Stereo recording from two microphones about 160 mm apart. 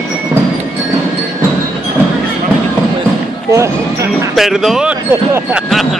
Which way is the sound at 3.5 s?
20° right (ahead or behind).